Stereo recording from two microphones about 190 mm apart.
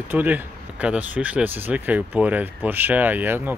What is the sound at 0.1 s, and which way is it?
Speech, 10° right (ahead or behind).